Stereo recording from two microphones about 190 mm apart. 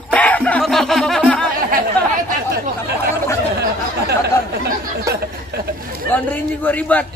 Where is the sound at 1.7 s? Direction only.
50° right (ahead or behind).